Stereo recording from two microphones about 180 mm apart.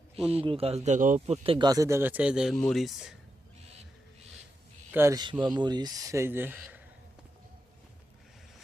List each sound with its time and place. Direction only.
0.3 s speech: 30° right (ahead or behind)
1.5 s speech: 25° right (ahead or behind); by 3.2 s centre (ahead or behind)
4.9 s speech: 15° right (ahead or behind)
6.6 s a sound: 10° right (ahead or behind)